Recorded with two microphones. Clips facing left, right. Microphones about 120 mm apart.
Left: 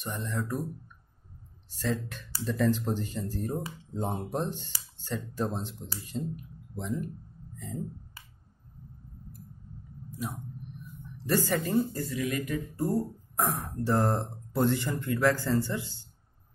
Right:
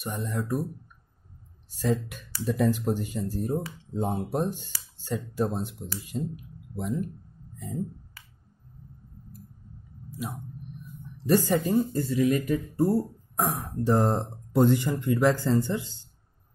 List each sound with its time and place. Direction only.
0.0 s speech: 15° right (ahead or behind)
1.7 s speech: 15° right (ahead or behind)
7.5 s speech: 15° right (ahead or behind)
11.2 s speech: 15° right (ahead or behind)
12.0 s speech: 30° right (ahead or behind)
13.4 s speech: 10° right (ahead or behind)